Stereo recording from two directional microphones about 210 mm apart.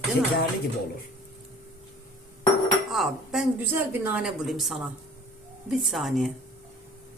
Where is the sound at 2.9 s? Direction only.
Centre (ahead or behind).